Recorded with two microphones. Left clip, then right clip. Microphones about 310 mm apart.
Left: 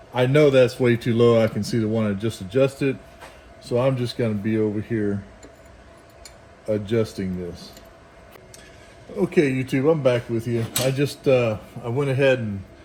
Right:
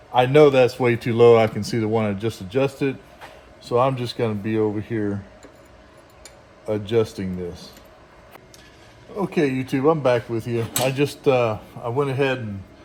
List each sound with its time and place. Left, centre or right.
0.1 s a man's voice: centre
6.7 s a man's voice: centre
9.1 s a man's voice: centre
10.9 s speech: right
11.3 s speech: centre